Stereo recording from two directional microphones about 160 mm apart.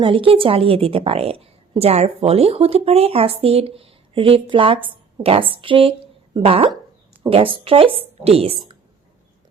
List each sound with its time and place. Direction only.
0.0 s a woman's voice: 35° right (ahead or behind)